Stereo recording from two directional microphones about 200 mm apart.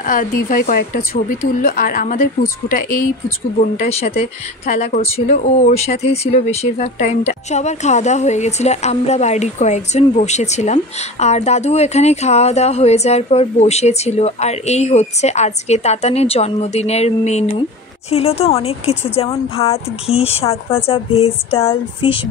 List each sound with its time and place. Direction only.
0.0 s a woman's voice: 40° left (ahead or behind); by 22.2 s 25° left (ahead or behind)